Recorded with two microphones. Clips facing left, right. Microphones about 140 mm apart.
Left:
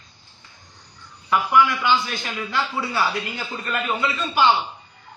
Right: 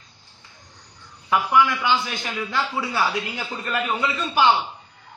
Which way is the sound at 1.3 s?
15° right (ahead or behind).